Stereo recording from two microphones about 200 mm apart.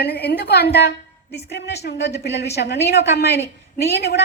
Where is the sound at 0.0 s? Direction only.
55° left (ahead or behind).